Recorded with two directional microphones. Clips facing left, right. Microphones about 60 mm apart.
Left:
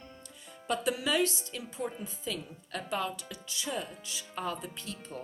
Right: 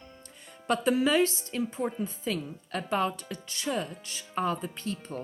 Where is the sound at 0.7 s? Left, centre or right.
Right.